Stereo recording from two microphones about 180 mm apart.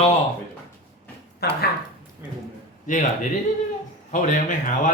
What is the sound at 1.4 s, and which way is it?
Speech, 60° left (ahead or behind).